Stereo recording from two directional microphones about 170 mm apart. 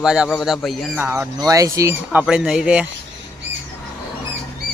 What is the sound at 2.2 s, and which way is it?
Speech, 5° right (ahead or behind).